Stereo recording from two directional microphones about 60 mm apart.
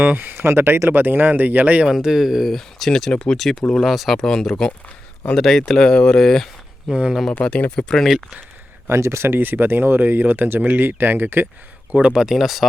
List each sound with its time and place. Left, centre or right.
0.0 s speech: right
2.0 s speech: centre
3.1 s speech: centre
3.3 s speech: centre
6.9 s speech: centre
7.4 s speech: left
7.8 s speech: centre
8.9 s speech: right
11.9 s speech: centre